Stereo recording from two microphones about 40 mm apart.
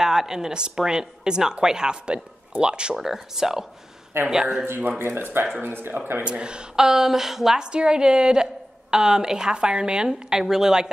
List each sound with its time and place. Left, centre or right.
0.0 s a woman's voice: centre
3.0 s a woman's voice: centre
4.9 s speech: right
6.2 s a woman's voice: right
6.9 s a woman's voice: centre
7.6 s a woman's voice: right